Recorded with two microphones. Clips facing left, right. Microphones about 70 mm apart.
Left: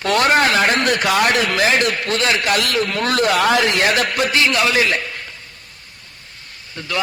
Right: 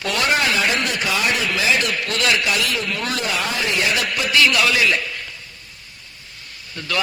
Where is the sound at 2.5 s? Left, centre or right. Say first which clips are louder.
Left 4 dB; left.